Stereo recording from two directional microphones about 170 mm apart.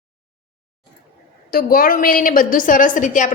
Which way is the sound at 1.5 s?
60° left (ahead or behind).